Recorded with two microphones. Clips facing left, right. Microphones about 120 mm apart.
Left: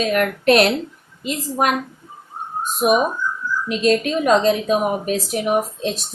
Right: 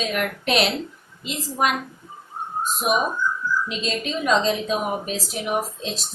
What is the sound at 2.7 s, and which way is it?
A woman's voice, 50° left (ahead or behind).